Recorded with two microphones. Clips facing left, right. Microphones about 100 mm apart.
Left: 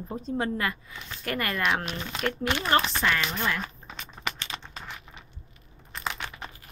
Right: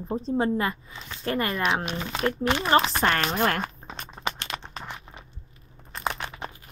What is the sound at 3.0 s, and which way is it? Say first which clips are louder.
Speech: right 3 dB; 50° right (ahead or behind).